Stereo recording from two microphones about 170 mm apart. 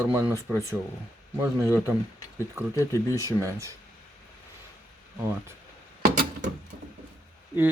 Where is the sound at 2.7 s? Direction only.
20° left (ahead or behind).